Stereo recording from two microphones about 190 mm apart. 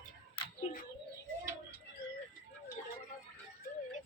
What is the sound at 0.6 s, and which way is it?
Bird, 35° left (ahead or behind).